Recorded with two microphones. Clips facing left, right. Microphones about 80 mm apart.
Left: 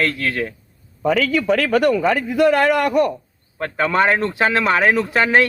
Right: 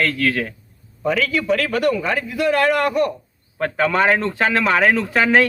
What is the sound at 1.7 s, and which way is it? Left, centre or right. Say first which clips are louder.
Speech: left 3 dB; left.